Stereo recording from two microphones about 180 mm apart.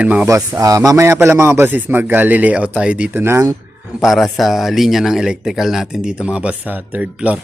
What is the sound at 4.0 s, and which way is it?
Speech, centre (ahead or behind).